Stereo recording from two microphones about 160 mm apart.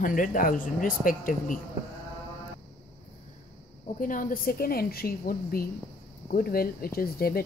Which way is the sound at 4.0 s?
60° left (ahead or behind).